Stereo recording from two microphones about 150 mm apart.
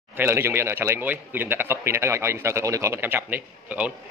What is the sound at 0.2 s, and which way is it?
A man's voice, 15° right (ahead or behind).